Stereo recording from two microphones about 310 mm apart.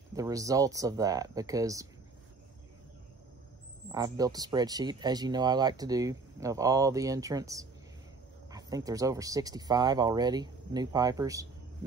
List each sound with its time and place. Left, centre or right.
0.1 s speech: centre
3.9 s speech: centre